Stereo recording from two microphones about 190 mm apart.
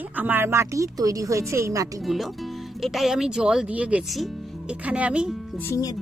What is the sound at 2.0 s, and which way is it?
Speech, centre (ahead or behind).